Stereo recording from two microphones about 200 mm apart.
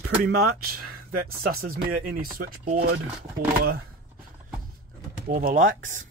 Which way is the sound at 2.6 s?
35° right (ahead or behind).